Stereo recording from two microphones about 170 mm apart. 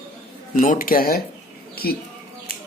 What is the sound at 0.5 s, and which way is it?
Speech, 55° left (ahead or behind).